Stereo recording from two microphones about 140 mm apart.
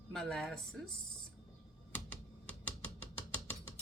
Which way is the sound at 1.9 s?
10° left (ahead or behind).